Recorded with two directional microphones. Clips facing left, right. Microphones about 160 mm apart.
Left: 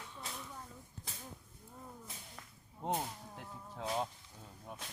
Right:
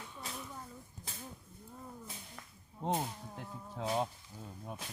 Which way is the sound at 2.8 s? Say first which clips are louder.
Right 2 dB; centre (ahead or behind).